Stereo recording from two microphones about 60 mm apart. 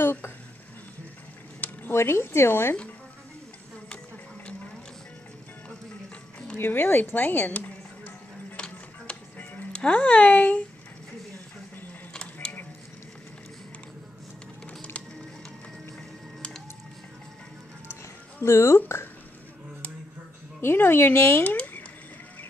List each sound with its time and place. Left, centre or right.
0.0 s speech: left
1.6 s a sound: left
2.0 s speech: left
6.5 s music: left
8.5 s music: centre
9.4 s music: left
9.8 s speech: left
12.1 s printer: centre
18.4 s speech: left
20.6 s speech: left
21.5 s a sound: left